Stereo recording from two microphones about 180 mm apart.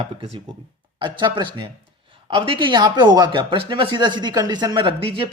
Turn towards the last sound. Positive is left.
turn(degrees=-30)  # may be behind; listen again after turning